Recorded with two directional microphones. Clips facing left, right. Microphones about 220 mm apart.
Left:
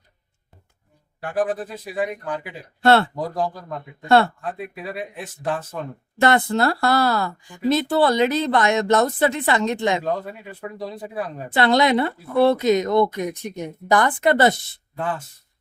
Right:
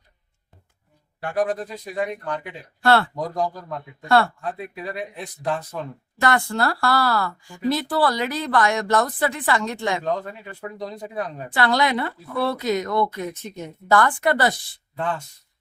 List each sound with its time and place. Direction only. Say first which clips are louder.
1.2 s speech: even; 5° left (ahead or behind)
2.8 s speech: left 3 dB; 25° left (ahead or behind)
3.2 s speech: even; 5° left (ahead or behind)
6.1 s speech: left 4 dB; 25° left (ahead or behind)
10.0 s speech: even; 5° left (ahead or behind)
11.5 s speech: left 4 dB; 20° left (ahead or behind)
14.9 s speech: even; 5° left (ahead or behind)